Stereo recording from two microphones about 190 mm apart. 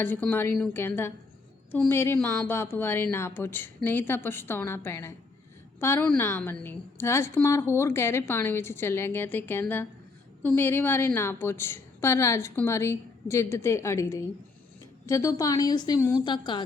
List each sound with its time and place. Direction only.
0.0 s a woman's voice: 10° left (ahead or behind)